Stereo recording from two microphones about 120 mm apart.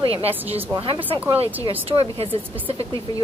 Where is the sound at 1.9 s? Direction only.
50° right (ahead or behind).